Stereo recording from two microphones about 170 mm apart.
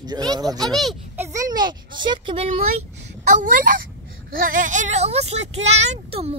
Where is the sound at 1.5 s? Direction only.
25° right (ahead or behind).